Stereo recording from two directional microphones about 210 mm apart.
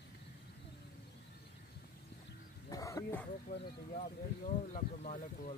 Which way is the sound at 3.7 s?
40° left (ahead or behind).